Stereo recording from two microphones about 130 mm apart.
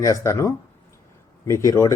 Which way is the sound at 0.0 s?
25° left (ahead or behind).